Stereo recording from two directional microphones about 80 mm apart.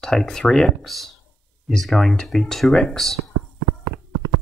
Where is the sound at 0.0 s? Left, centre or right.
Centre.